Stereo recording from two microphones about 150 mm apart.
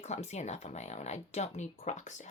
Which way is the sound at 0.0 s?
50° left (ahead or behind).